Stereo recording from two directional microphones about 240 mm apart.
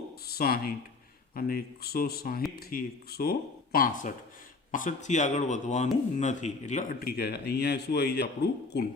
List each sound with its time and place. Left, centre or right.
0.3 s speech: left